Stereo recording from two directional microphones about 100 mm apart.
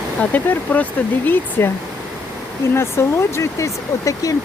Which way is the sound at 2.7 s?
25° left (ahead or behind).